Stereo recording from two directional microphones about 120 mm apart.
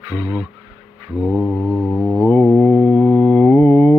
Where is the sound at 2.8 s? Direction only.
5° right (ahead or behind).